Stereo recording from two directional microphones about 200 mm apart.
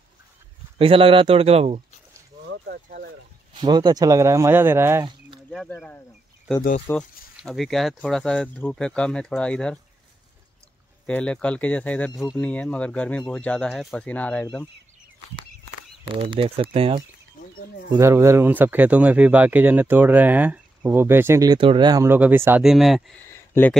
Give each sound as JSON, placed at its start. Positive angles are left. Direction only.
{"t": 0.7, "sound": "speech", "side_deg": -25}
{"t": 2.6, "sound": "a sound", "side_deg": -50}
{"t": 3.5, "sound": "speech", "side_deg": -20}
{"t": 5.5, "sound": "speech", "side_deg": 0}
{"t": 7.4, "sound": "speech", "side_deg": 0}
{"t": 11.1, "sound": "speech", "side_deg": 5}
{"t": 16.1, "sound": "speech", "side_deg": -25}
{"t": 17.9, "sound": "speech", "side_deg": -15}
{"t": 23.2, "sound": "a sound", "side_deg": 10}